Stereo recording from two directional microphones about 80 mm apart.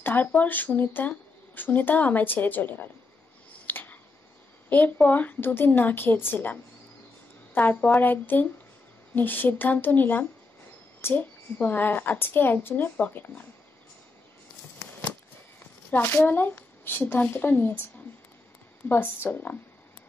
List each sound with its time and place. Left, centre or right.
0.0 s speech: left
3.6 s finger snapping: left
4.6 s a woman's voice: centre
15.9 s speech: left
18.9 s speech: left